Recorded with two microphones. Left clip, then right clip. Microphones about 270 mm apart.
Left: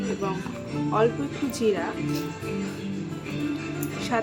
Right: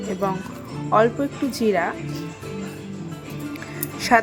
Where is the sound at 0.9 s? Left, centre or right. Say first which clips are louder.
Right 6 dB; centre.